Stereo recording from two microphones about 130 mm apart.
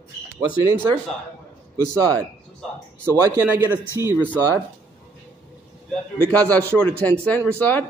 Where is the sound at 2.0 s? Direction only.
15° left (ahead or behind).